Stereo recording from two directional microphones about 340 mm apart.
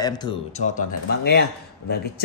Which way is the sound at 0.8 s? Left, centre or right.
Left.